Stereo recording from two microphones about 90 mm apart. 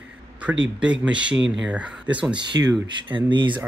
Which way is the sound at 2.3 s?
55° right (ahead or behind).